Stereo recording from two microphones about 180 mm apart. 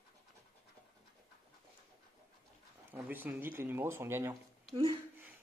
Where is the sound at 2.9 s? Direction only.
10° right (ahead or behind).